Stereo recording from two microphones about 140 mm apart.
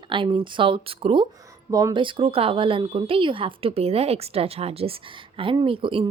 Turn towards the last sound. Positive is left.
turn(degrees=-40)  # may be behind; listen again after turning